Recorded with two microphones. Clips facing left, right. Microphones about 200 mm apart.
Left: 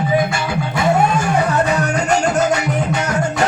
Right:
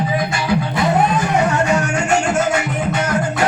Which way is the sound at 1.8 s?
35° left (ahead or behind).